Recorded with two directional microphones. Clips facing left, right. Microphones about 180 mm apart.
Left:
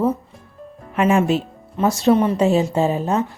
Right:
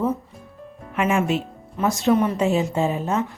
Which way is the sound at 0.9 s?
35° left (ahead or behind).